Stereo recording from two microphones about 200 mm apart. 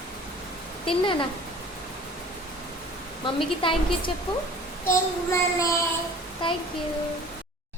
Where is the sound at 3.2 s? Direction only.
25° left (ahead or behind).